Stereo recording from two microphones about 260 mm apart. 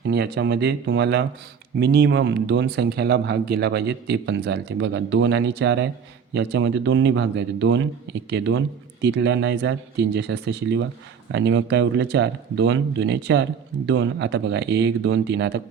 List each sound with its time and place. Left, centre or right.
0.1 s speech: right